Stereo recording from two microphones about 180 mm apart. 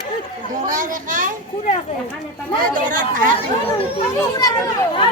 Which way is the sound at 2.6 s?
50° right (ahead or behind).